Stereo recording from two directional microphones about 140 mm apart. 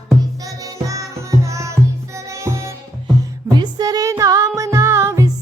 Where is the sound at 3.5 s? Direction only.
30° right (ahead or behind).